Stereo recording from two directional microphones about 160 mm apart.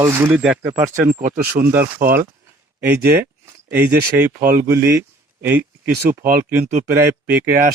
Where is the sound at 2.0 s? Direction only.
70° right (ahead or behind).